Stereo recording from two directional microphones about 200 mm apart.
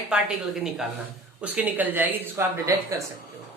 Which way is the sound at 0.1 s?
5° right (ahead or behind).